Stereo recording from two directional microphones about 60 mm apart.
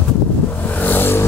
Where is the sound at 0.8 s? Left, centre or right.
Left.